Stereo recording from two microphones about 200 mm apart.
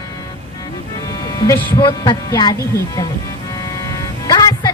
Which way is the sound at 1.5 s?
15° left (ahead or behind).